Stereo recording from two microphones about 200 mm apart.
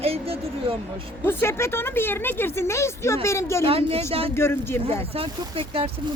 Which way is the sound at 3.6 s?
30° right (ahead or behind).